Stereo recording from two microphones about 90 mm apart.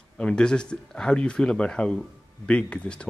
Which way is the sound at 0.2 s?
10° left (ahead or behind).